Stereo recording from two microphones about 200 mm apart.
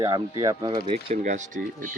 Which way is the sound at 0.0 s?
15° right (ahead or behind).